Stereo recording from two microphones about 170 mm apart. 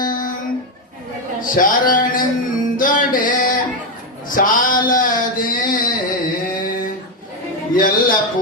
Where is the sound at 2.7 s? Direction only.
55° left (ahead or behind).